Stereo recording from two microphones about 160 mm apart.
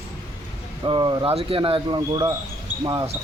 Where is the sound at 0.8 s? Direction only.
25° right (ahead or behind).